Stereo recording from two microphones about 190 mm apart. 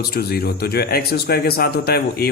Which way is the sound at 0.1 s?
55° left (ahead or behind).